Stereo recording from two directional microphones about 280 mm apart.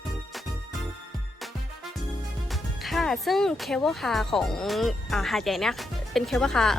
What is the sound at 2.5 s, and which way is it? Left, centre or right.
Speech, centre.